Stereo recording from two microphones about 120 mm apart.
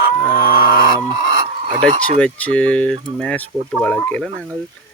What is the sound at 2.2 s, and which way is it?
Speech, 10° left (ahead or behind).